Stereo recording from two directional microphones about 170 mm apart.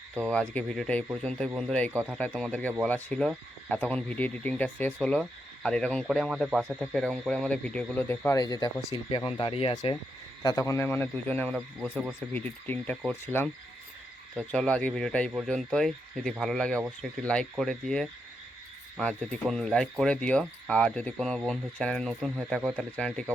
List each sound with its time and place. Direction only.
0.3 s speech: 5° left (ahead or behind)
1.9 s speech: 15° right (ahead or behind)
2.1 s speech: 5° left (ahead or behind); by 6.8 s 10° right (ahead or behind)
6.9 s speech: 5° left (ahead or behind)